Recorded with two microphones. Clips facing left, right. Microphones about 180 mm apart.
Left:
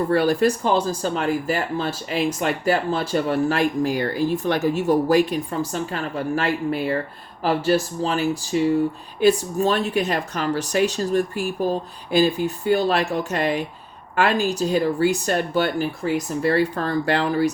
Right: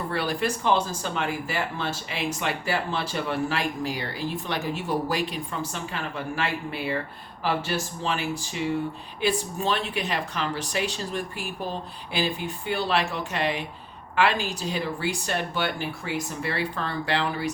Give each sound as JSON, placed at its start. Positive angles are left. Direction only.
{"t": 0.1, "sound": "speech", "side_deg": 45}